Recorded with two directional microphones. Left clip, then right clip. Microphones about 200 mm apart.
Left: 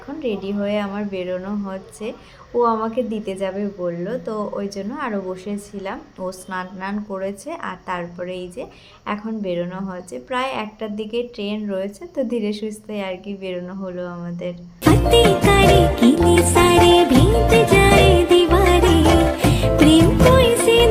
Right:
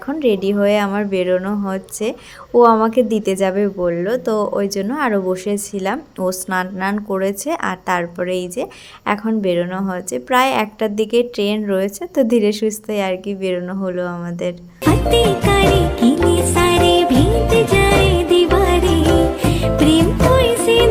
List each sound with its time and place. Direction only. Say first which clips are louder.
0.1 s speech: right 9 dB; 45° right (ahead or behind)
14.8 s music: even; centre (ahead or behind)